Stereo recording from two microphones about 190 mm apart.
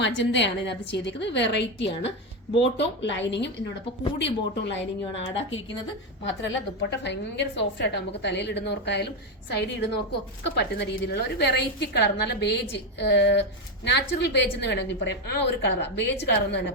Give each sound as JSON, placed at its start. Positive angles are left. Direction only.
{"t": 0.0, "sound": "a woman's voice", "side_deg": 70}
{"t": 5.3, "sound": "a woman's voice", "side_deg": 85}
{"t": 7.0, "sound": "a woman's voice", "side_deg": 65}